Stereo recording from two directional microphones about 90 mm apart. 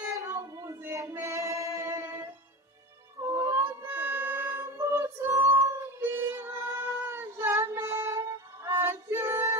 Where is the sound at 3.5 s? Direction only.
25° right (ahead or behind).